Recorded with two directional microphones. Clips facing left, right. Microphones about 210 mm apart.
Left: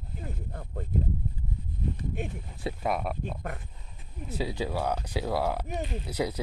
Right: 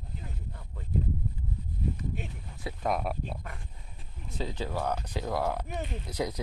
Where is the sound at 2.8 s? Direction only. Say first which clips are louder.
Right 1 dB; centre (ahead or behind).